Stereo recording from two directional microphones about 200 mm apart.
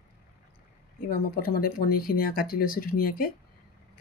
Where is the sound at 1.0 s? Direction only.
45° left (ahead or behind).